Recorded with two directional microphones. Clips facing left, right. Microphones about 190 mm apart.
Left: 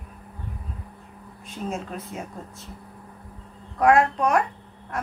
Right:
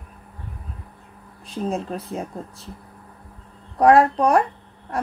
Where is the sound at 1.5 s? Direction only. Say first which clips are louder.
Right 5 dB; 35° right (ahead or behind).